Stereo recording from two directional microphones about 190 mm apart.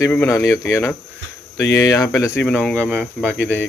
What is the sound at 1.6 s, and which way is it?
Cricket, 65° left (ahead or behind).